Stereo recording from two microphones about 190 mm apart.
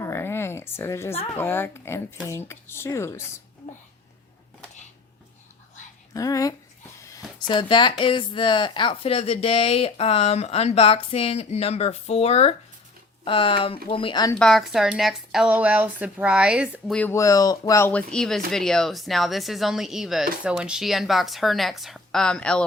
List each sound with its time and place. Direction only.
0.0 s a sound: 15° left (ahead or behind)
1.4 s speech: 10° left (ahead or behind)
6.1 s speech: 20° left (ahead or behind)
14.3 s speech: 5° left (ahead or behind)
17.0 s speech: 15° left (ahead or behind)